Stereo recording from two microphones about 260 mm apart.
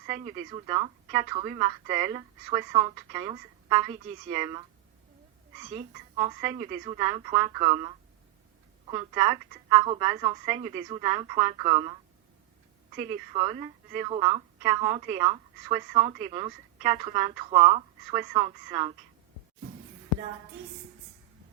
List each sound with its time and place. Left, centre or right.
0.3 s a woman's voice: centre
5.6 s a woman's voice: right
8.9 s a woman's voice: centre
13.0 s a woman's voice: right